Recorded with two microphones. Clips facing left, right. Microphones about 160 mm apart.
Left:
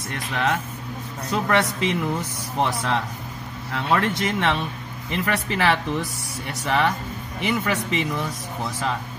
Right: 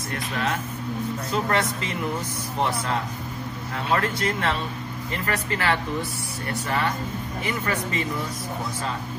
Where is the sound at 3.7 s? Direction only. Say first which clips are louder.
Left 3 dB; 80° left.